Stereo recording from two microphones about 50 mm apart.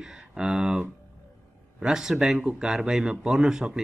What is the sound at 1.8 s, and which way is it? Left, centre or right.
Speech, centre.